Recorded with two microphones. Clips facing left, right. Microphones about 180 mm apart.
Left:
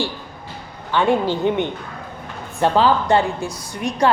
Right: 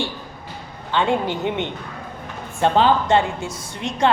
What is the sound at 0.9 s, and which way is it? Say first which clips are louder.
Speech: left 3 dB; 20° right (ahead or behind).